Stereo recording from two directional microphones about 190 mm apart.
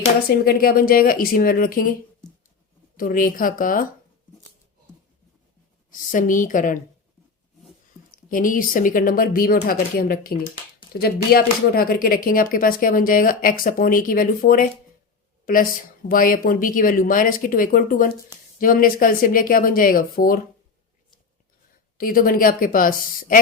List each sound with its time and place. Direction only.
0.3 s speech: 50° left (ahead or behind)
3.0 s speech: 45° left (ahead or behind)
5.9 s speech: 45° left (ahead or behind)
8.1 s speech: 45° left (ahead or behind)
16.0 s speech: 45° left (ahead or behind)
21.9 s speech: 50° left (ahead or behind)